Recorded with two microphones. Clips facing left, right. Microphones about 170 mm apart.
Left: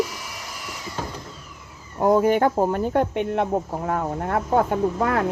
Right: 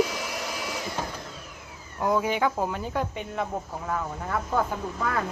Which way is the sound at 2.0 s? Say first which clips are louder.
Left 7 dB; 50° left (ahead or behind).